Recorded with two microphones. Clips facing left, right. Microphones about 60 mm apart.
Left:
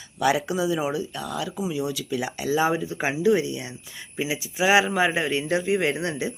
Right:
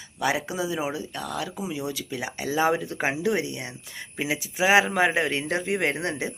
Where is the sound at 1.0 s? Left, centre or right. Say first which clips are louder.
Left 2 dB; right.